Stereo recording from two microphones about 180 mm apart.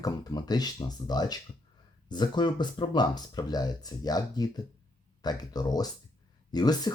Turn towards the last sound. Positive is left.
turn(degrees=20)  # may be behind; listen again after turning